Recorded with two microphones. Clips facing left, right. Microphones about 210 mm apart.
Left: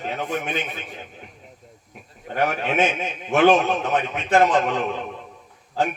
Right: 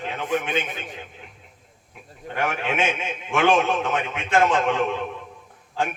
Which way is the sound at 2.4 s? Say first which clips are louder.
Left 3 dB; 40° left (ahead or behind).